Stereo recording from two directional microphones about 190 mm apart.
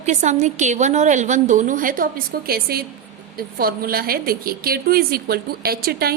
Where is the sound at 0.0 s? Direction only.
40° right (ahead or behind).